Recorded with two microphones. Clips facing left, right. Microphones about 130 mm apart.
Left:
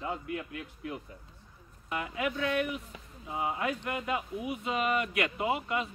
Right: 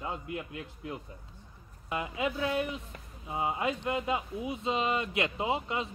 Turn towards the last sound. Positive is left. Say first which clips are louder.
# left 1 dB
turn(degrees=-25)  # may be behind; listen again after turning